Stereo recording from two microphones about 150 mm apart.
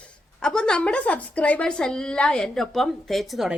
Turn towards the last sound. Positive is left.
turn(degrees=0)  # may be behind; listen again after turning